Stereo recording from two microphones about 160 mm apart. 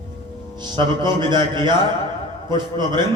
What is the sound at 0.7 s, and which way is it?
A man's voice, 30° right (ahead or behind).